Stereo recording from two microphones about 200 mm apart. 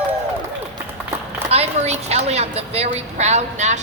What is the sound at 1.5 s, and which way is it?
Speech, 30° right (ahead or behind).